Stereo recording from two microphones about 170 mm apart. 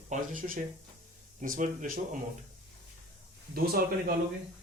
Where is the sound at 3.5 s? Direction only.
65° right (ahead or behind).